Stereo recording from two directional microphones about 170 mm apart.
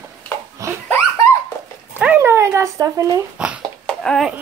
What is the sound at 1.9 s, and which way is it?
Dog, 10° right (ahead or behind).